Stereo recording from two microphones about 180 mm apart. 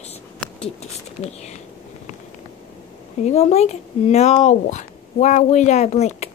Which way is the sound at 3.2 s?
35° left (ahead or behind).